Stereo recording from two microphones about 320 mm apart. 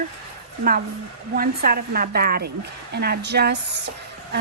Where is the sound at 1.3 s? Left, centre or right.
Right.